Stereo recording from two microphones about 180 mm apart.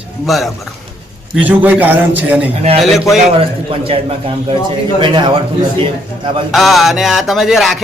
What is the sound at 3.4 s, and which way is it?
Speech, 30° right (ahead or behind).